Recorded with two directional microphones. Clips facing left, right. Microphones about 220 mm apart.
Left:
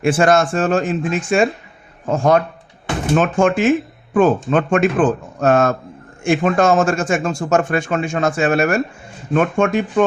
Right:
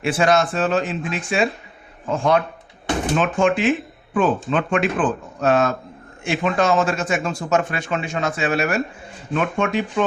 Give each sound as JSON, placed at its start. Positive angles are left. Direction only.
{"t": 0.0, "sound": "speech", "side_deg": 50}